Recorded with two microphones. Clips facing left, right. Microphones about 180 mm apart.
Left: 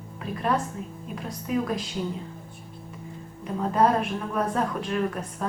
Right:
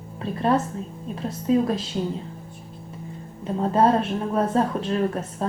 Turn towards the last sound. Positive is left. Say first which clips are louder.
# right 3 dB
turn(degrees=-30)  # may be behind; listen again after turning